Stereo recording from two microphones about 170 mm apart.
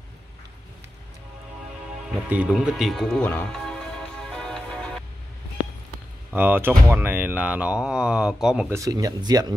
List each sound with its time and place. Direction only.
2.2 s music: 5° right (ahead or behind)
6.3 s speech: 10° right (ahead or behind)
8.6 s speech: 20° right (ahead or behind)